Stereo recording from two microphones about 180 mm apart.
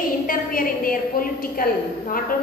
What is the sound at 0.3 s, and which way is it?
A woman's voice, 50° left (ahead or behind).